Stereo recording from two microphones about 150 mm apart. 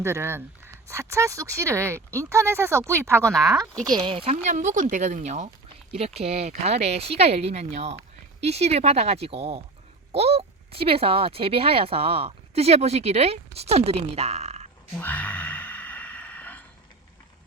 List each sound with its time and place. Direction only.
0.0 s speech: 15° right (ahead or behind); by 4.4 s 35° right (ahead or behind)
4.4 s speech: 55° right (ahead or behind)
14.9 s a sound: 10° left (ahead or behind)